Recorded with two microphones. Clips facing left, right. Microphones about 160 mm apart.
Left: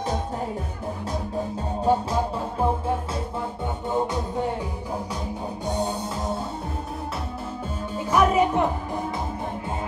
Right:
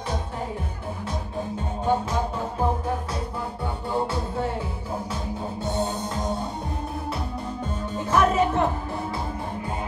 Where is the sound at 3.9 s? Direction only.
15° left (ahead or behind).